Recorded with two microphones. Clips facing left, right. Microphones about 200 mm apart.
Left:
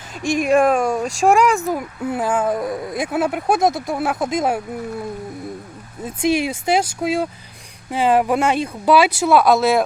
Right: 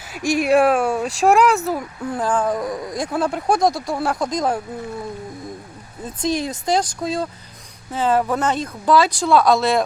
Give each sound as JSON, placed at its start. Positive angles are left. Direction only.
{"t": 0.1, "sound": "speech", "side_deg": -10}
{"t": 1.4, "sound": "speech", "side_deg": 15}
{"t": 3.6, "sound": "speech", "side_deg": 20}
{"t": 3.9, "sound": "speech", "side_deg": 5}
{"t": 6.0, "sound": "speech", "side_deg": 10}